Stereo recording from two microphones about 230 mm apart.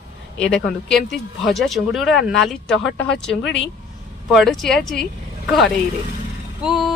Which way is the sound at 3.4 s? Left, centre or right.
Left.